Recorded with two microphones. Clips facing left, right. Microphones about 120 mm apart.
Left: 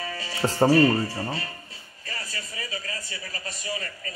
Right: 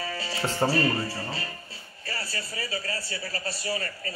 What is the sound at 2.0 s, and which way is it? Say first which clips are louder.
Speech: right 2 dB; 35° right (ahead or behind).